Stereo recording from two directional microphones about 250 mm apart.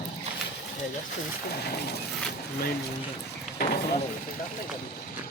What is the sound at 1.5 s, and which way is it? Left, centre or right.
Speech, left.